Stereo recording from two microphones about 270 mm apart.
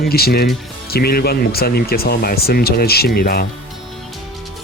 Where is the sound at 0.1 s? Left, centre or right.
Left.